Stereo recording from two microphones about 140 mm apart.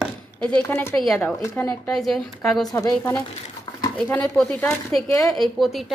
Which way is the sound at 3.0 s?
15° left (ahead or behind).